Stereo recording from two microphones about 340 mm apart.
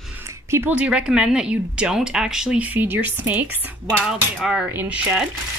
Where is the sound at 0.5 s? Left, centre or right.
Centre.